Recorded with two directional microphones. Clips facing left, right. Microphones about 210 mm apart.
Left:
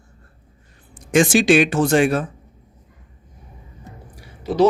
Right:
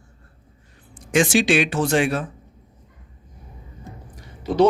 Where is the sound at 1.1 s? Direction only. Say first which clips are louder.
Left 4 dB; 45° left (ahead or behind).